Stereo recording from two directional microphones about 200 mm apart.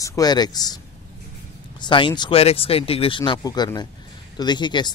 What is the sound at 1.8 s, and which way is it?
Speech, 25° left (ahead or behind).